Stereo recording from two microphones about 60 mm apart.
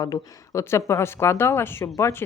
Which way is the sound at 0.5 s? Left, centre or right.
Left.